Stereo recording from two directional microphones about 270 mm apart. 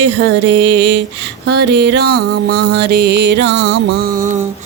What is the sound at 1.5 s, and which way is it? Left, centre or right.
Music, right.